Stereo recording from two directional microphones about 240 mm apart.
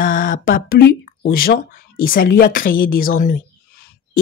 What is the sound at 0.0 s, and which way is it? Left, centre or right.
A woman's voice, left.